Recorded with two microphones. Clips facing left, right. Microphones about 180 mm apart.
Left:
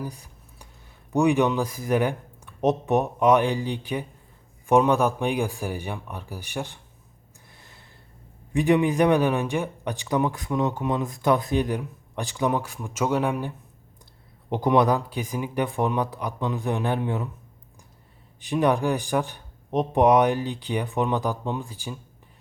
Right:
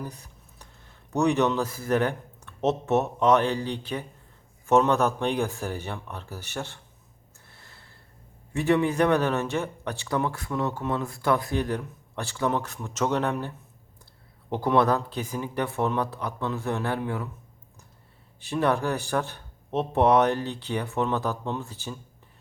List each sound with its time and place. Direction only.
0.0 s speech: 10° left (ahead or behind)
7.4 s gasp: 15° left (ahead or behind)
8.5 s speech: 15° left (ahead or behind)
14.5 s speech: 15° left (ahead or behind)
18.3 s speech: 15° left (ahead or behind)